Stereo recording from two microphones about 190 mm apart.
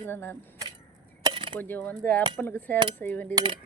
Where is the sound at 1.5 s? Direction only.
10° left (ahead or behind).